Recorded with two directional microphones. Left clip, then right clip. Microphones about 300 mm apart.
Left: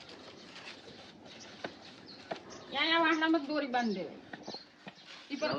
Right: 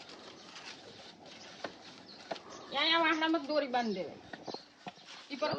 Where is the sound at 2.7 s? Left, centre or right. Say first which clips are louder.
Even; right.